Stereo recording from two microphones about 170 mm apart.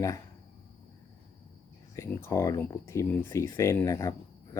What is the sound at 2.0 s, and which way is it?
Speech, 15° left (ahead or behind).